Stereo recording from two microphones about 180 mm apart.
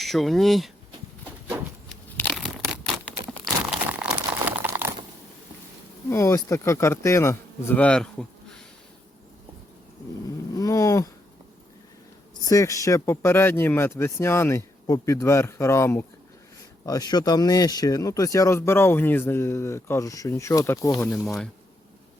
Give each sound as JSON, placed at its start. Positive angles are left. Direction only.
{"t": 0.0, "sound": "speech", "side_deg": 0}
{"t": 2.1, "sound": "tearing", "side_deg": 5}
{"t": 3.1, "sound": "crumpling", "side_deg": 0}
{"t": 6.1, "sound": "speech", "side_deg": 15}
{"t": 10.5, "sound": "a sound", "side_deg": 20}
{"t": 12.5, "sound": "speech", "side_deg": 20}
{"t": 21.2, "sound": "speech", "side_deg": 5}